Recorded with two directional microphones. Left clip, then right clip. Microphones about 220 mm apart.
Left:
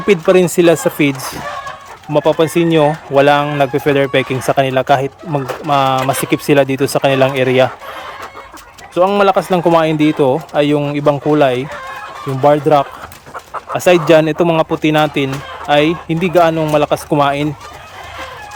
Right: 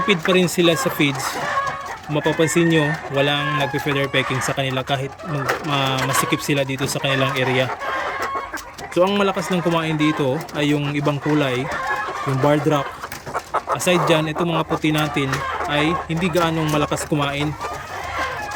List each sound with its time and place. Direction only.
0.1 s speech: 15° left (ahead or behind)
2.1 s speech: 10° left (ahead or behind)
9.0 s speech: 10° left (ahead or behind)